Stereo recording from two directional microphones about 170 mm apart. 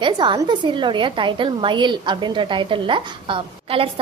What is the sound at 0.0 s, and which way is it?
A woman's voice, 25° right (ahead or behind).